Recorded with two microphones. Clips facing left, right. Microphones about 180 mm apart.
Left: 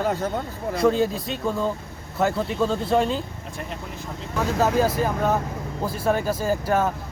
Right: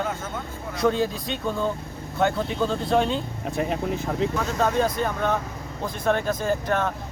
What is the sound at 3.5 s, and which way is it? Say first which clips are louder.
Speech: right 11 dB; 65° right (ahead or behind).